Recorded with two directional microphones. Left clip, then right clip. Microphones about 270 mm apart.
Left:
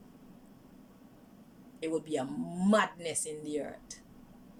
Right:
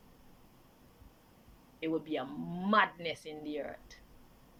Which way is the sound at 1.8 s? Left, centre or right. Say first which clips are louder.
Left 2 dB; centre.